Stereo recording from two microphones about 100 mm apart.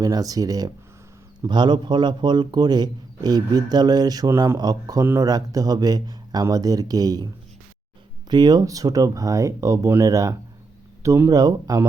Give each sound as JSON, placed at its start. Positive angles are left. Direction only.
{"t": 0.0, "sound": "speech", "side_deg": -40}
{"t": 1.5, "sound": "a man's voice", "side_deg": -50}
{"t": 8.3, "sound": "speech", "side_deg": -40}